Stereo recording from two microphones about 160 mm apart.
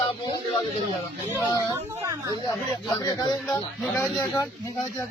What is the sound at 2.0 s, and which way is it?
Speech, 20° right (ahead or behind).